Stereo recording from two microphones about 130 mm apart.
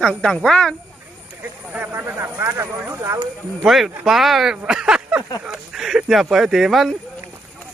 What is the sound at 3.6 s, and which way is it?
Speech, centre (ahead or behind).